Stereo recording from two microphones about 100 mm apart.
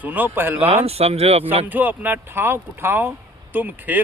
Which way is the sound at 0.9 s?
90° right.